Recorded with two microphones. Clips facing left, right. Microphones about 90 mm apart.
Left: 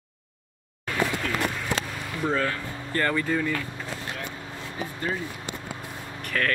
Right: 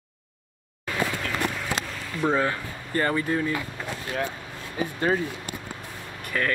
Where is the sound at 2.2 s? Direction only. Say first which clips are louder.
Right 3 dB; 20° right (ahead or behind).